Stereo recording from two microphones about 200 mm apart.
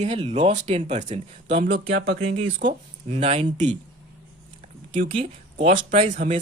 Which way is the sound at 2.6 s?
40° right (ahead or behind).